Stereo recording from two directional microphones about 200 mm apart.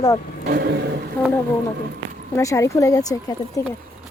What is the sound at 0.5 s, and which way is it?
Vehicle, 55° right (ahead or behind).